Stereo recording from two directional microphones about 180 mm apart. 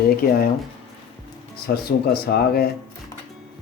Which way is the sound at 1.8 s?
60° left (ahead or behind).